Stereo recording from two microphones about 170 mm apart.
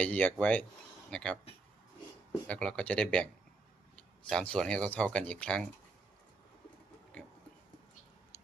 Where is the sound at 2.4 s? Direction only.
5° left (ahead or behind).